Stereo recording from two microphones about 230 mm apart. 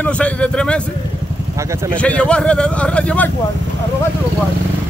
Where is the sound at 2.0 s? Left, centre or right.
Centre.